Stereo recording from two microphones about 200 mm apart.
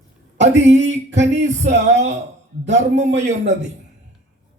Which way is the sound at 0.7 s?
35° right (ahead or behind).